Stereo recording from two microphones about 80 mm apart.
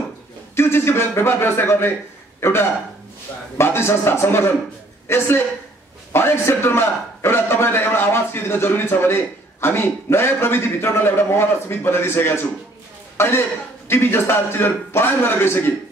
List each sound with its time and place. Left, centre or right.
0.6 s a man's voice: left